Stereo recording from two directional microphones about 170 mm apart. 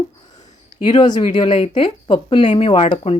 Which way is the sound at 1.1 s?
45° left (ahead or behind).